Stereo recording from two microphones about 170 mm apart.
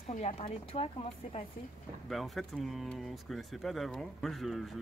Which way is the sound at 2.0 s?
Centre (ahead or behind).